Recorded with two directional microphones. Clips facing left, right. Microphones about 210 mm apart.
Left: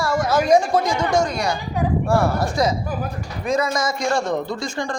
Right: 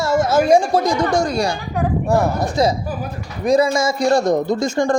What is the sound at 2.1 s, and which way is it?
Speech, 20° right (ahead or behind).